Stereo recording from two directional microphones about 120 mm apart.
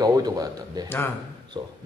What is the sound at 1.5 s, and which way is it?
Speech, 40° right (ahead or behind).